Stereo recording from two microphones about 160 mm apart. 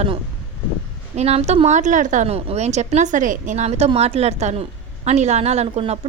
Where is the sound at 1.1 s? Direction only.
40° right (ahead or behind).